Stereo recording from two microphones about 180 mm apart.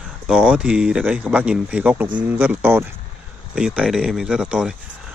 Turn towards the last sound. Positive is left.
turn(degrees=-5)  # may be behind; listen again after turning